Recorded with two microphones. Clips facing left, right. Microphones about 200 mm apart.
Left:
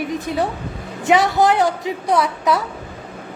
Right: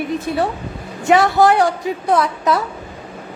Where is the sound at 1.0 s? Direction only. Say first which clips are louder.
Right 2 dB; 20° left (ahead or behind).